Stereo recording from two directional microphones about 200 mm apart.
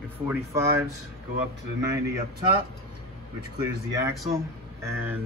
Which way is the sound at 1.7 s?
15° right (ahead or behind).